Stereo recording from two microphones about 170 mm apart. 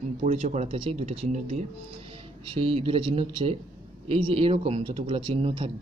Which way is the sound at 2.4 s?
30° right (ahead or behind).